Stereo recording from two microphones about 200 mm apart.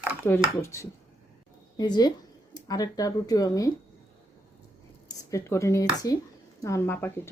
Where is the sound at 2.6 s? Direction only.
20° left (ahead or behind).